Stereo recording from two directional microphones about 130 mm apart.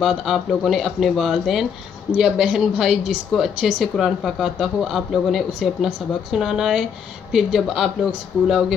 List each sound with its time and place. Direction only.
0.0 s speech: centre (ahead or behind)